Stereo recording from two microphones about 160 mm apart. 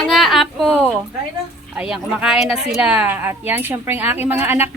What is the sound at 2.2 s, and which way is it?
A woman's voice, 5° right (ahead or behind).